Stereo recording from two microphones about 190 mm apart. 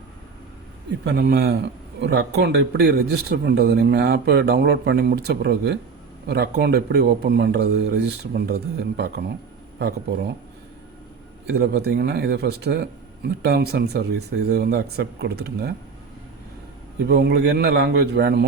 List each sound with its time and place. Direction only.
1.0 s a man's voice: 55° right (ahead or behind)
11.6 s a man's voice: 60° right (ahead or behind)
17.1 s a man's voice: 60° right (ahead or behind)